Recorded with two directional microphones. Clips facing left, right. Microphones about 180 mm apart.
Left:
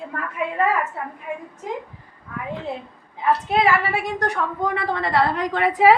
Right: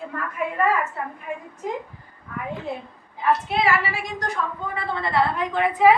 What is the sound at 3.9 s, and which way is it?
A woman's voice, 65° left (ahead or behind).